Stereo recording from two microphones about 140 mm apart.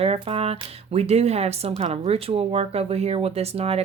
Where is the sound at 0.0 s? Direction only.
45° right (ahead or behind).